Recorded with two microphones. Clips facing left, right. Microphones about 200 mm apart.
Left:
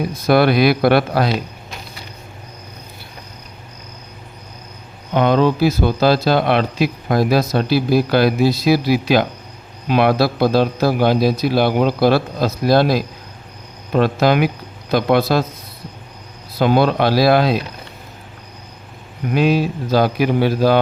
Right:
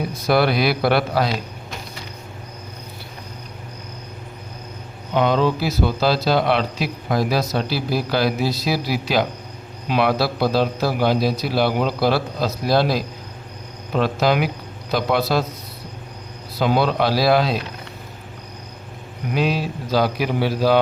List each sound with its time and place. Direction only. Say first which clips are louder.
0.3 s a man's voice: left 5 dB; 55° left (ahead or behind)
5.1 s a man's voice: left 3 dB; 55° left (ahead or behind)
16.6 s a man's voice: left 4 dB; 55° left (ahead or behind)
19.3 s speech: left 6 dB; 55° left (ahead or behind)